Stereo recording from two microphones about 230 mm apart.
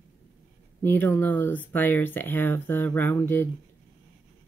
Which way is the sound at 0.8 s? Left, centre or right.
Centre.